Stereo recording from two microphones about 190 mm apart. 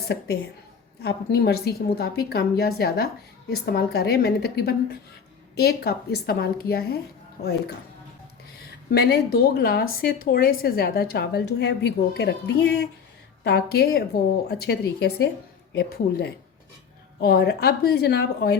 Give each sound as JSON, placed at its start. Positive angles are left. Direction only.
{"t": 1.0, "sound": "speech", "side_deg": 60}
{"t": 8.9, "sound": "speech", "side_deg": 60}